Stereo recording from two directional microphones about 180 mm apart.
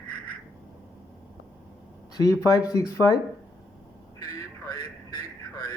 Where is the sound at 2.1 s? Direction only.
20° left (ahead or behind).